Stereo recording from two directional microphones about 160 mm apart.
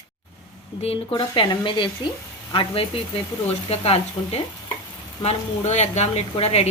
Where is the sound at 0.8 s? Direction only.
35° left (ahead or behind).